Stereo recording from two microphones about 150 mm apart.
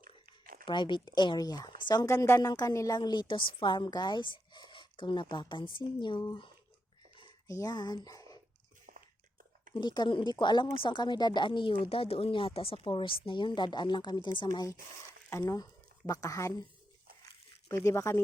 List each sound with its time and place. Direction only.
0.3 s a sound: 70° right (ahead or behind)
0.6 s a woman's voice: 30° left (ahead or behind)
7.2 s dog: 25° left (ahead or behind)
8.9 s biting: 70° right (ahead or behind)
9.7 s a woman's voice: 30° left (ahead or behind)
17.7 s speech: 20° left (ahead or behind)